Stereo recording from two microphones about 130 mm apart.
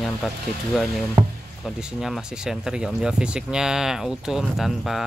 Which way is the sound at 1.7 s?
5° right (ahead or behind).